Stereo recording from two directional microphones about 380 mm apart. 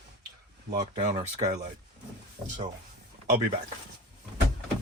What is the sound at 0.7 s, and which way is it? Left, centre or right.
Speech, centre.